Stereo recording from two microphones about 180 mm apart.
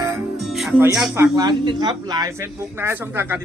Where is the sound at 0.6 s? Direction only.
5° right (ahead or behind).